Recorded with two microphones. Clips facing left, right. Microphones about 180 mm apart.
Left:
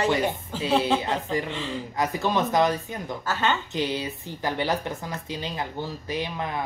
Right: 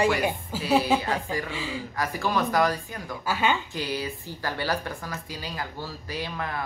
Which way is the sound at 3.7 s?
20° left (ahead or behind).